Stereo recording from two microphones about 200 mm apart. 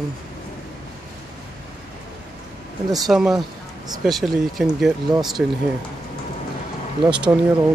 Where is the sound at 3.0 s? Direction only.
Centre (ahead or behind).